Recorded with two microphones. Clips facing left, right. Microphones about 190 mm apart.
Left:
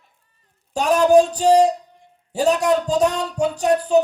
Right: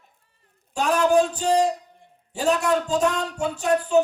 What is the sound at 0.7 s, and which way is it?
Speech, 40° left (ahead or behind).